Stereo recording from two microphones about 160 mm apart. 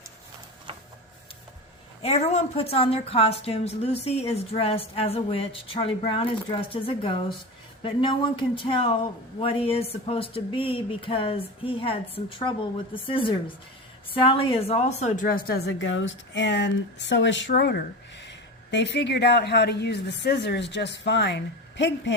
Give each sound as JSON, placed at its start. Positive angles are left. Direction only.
{"t": 0.7, "sound": "printer", "side_deg": -35}
{"t": 2.0, "sound": "a woman's voice", "side_deg": 40}
{"t": 16.3, "sound": "speech", "side_deg": 90}
{"t": 17.5, "sound": "speech", "side_deg": 80}